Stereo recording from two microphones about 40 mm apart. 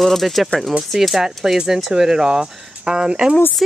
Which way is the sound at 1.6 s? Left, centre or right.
Centre.